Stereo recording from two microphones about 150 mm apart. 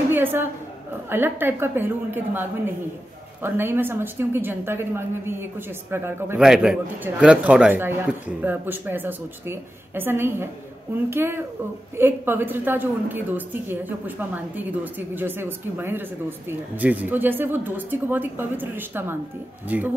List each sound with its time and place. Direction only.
0.1 s a woman's voice: 15° right (ahead or behind)
6.4 s a woman's voice: 5° right (ahead or behind)